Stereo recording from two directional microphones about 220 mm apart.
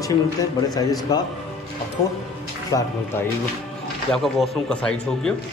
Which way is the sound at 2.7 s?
15° left (ahead or behind).